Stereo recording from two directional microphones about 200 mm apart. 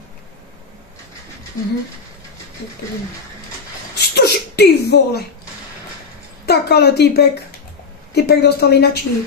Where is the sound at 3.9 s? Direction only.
55° left (ahead or behind).